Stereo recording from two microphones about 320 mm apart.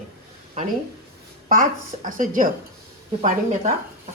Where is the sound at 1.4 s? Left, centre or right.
Right.